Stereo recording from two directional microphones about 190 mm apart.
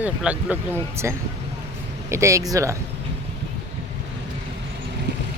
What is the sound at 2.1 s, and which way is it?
Speech, 15° right (ahead or behind).